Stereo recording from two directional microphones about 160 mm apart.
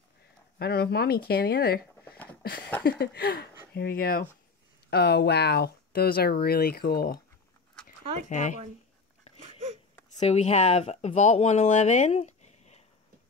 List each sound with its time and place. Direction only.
0.6 s speech: 85° left
2.8 s speech: 80° left
4.8 s speech: 90° left; by 7.2 s 70° left (ahead or behind)
8.3 s speech: 50° left (ahead or behind)
10.2 s speech: 40° left (ahead or behind)